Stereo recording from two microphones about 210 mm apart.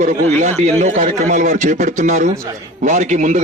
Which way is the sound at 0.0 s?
35° right (ahead or behind).